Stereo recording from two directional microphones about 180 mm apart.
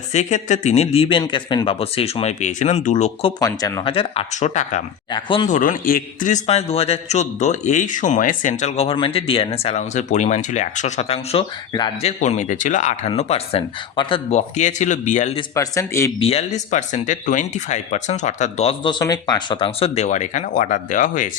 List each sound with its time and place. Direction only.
0.1 s a man's voice: 40° left (ahead or behind)
3.4 s a man's voice: 25° left (ahead or behind); by 4.8 s 40° left (ahead or behind)
5.1 s speech: 30° left (ahead or behind)
5.5 s a man's voice: 45° left (ahead or behind); by 11.9 s 30° left (ahead or behind)
12.0 s a man's voice: 40° left (ahead or behind)
15.5 s a man's voice: 15° left (ahead or behind)
16.2 s a man's voice: 35° left (ahead or behind)